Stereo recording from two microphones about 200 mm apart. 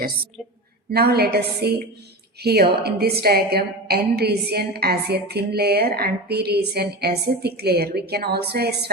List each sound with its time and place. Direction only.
0.9 s a woman's voice: 55° right (ahead or behind)